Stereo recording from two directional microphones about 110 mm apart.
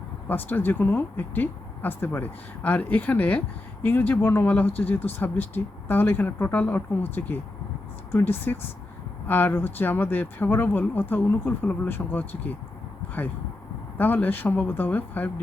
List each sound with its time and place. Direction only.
0.3 s speech: 15° left (ahead or behind)
14.0 s speech: 15° left (ahead or behind)